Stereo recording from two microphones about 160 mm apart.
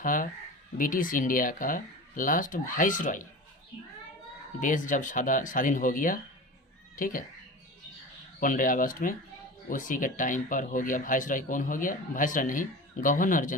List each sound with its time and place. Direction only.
0.0 s speech: 60° left (ahead or behind)
4.6 s speech: 55° left (ahead or behind)
8.4 s speech: 60° left (ahead or behind)